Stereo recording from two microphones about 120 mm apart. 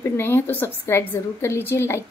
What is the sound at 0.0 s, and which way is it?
A woman's voice, 20° left (ahead or behind).